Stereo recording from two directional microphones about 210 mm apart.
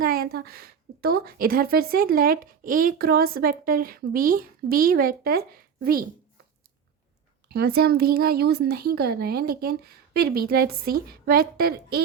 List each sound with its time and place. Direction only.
0.0 s a woman's voice: 45° right (ahead or behind)
7.4 s a woman's voice: 50° right (ahead or behind)